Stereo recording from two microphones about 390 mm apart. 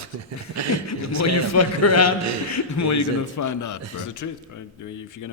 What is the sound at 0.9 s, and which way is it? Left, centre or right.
A man's voice, left.